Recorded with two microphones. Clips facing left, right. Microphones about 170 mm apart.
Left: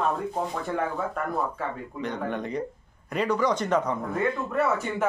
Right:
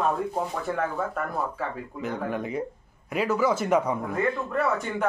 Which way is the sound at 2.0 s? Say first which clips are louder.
Right 1 dB; 5° right (ahead or behind).